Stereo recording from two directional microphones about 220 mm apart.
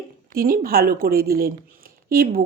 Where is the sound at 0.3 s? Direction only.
40° right (ahead or behind).